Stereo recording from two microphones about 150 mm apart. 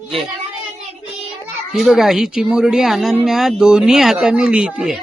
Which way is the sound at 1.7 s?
Centre (ahead or behind).